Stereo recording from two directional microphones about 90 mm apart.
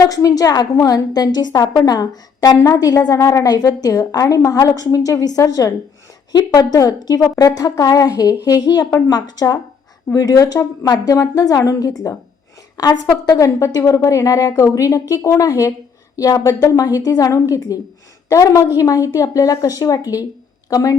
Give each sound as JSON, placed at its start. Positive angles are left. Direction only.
{"t": 0.1, "sound": "a woman's voice", "side_deg": 40}